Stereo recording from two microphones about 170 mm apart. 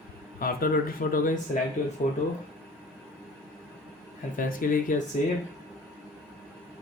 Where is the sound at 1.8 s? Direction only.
45° left (ahead or behind).